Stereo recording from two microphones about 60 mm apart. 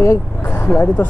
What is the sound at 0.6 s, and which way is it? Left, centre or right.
Speech, left.